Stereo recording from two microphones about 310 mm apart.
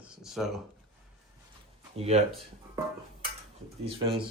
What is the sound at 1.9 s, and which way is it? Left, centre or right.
Speech, centre.